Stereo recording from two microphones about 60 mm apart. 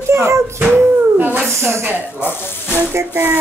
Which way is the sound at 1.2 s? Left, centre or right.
Right.